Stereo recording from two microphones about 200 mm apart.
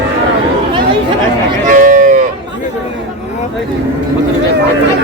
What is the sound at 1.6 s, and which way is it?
Cattle, 40° right (ahead or behind).